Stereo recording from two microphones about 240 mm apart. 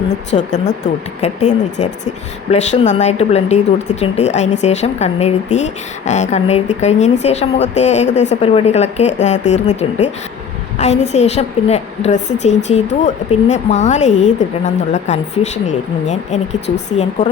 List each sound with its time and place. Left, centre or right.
0.3 s a woman's voice: left